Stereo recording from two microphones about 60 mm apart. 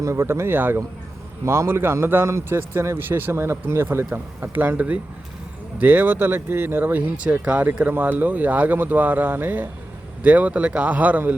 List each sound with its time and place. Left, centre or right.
0.0 s speech: right
4.1 s speech: right
5.8 s speech: right
7.9 s speech: right